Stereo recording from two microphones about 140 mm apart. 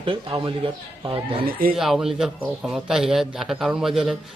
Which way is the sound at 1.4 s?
90° right.